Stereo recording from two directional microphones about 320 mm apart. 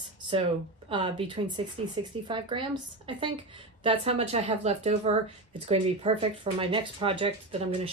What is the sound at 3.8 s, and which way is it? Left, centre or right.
Speech, centre.